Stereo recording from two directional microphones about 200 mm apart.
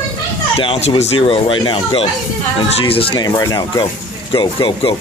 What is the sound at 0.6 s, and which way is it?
Speech, 30° left (ahead or behind).